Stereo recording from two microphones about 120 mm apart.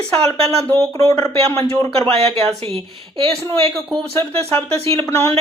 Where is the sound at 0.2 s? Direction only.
60° right (ahead or behind).